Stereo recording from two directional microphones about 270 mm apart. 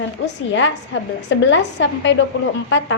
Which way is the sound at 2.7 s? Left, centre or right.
Left.